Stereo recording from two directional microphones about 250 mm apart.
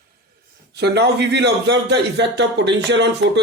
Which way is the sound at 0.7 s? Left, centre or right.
Right.